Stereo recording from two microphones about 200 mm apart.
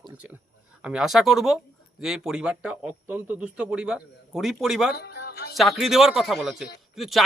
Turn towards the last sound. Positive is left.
turn(degrees=0)  # may be behind; listen again after turning